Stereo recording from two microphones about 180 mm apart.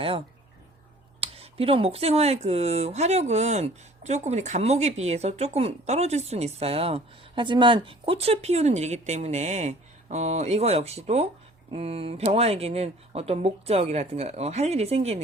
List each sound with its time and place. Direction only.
1.2 s speech: 35° right (ahead or behind)